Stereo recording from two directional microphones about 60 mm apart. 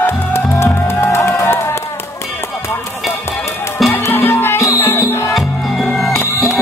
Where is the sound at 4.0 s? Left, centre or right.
Left.